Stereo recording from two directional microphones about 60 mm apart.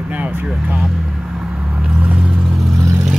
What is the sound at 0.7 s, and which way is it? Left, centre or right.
Vehicle, centre.